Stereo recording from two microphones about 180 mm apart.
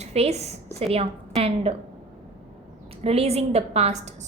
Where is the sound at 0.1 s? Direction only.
35° right (ahead or behind).